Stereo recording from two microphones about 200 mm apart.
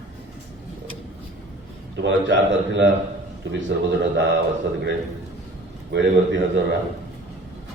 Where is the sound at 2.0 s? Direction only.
65° right (ahead or behind).